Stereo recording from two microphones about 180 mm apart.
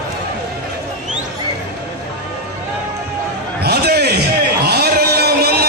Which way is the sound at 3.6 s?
65° right (ahead or behind).